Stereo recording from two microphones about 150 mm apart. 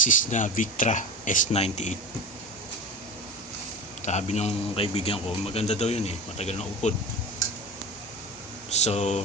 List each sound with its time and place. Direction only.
0.1 s speech: 55° left (ahead or behind)
4.0 s speech: 50° left (ahead or behind)
8.8 s speech: 50° left (ahead or behind)